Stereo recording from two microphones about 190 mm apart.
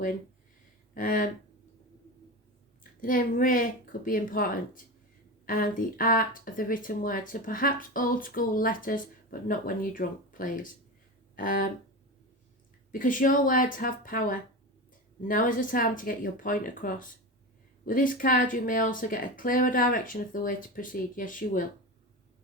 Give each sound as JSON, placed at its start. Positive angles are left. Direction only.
{"t": 0.9, "sound": "speech", "side_deg": 45}
{"t": 3.0, "sound": "speech", "side_deg": 45}
{"t": 12.9, "sound": "speech", "side_deg": 45}